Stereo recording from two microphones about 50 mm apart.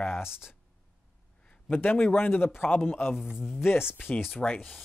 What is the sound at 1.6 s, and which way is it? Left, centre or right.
A man's voice, left.